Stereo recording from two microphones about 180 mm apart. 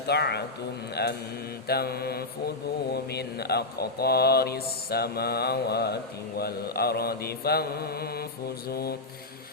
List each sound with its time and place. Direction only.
0.1 s speech: 65° left (ahead or behind)